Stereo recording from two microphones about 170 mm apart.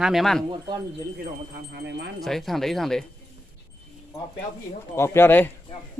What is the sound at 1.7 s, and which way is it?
Speech, 85° right.